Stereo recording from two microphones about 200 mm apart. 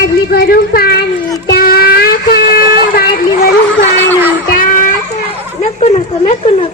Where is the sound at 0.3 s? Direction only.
50° left (ahead or behind).